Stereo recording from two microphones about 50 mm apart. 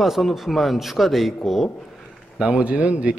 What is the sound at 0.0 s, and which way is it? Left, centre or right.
A man's voice, centre.